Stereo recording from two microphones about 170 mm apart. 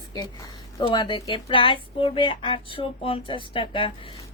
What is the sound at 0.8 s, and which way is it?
Speech, 25° left (ahead or behind).